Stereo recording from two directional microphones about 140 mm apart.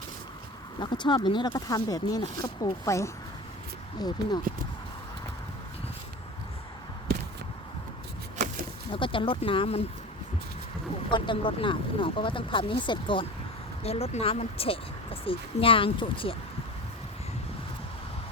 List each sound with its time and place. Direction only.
0.8 s speech: 35° left (ahead or behind)
8.9 s speech: 40° left (ahead or behind)
11.1 s speech: 35° left (ahead or behind)
13.8 s speech: 50° left (ahead or behind)